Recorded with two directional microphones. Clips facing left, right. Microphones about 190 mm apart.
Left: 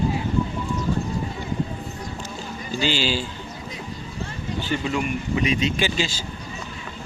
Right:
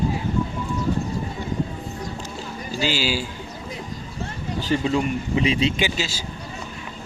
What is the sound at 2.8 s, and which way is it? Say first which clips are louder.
Speech: even; 5° right (ahead or behind).